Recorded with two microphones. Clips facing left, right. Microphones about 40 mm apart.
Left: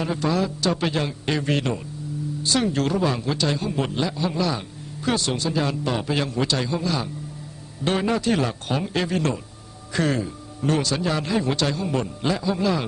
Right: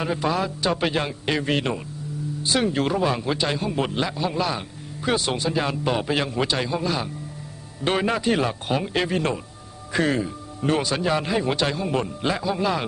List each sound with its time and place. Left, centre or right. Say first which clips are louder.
0.0 s a man's voice: even; centre